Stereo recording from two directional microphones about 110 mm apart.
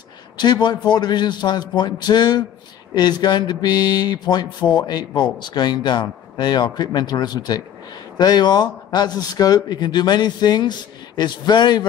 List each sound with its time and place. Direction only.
0.4 s mantra: 40° left (ahead or behind)